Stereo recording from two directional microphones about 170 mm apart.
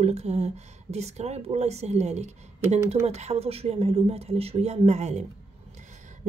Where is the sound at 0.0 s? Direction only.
40° right (ahead or behind).